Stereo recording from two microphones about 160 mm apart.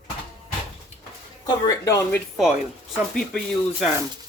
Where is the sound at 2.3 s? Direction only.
5° right (ahead or behind).